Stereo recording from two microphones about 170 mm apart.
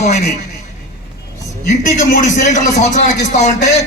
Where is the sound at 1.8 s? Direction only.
45° left (ahead or behind).